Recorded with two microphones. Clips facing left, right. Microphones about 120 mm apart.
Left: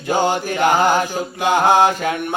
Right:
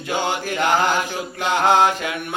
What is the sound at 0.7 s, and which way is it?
Mantra, 15° left (ahead or behind).